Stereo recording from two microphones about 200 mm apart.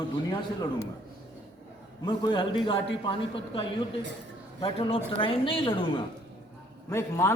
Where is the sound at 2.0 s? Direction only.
20° left (ahead or behind).